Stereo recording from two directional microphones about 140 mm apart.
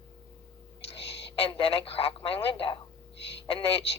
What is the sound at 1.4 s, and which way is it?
Speech, 40° left (ahead or behind).